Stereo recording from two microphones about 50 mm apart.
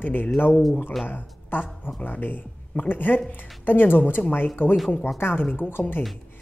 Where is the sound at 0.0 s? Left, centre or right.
Left.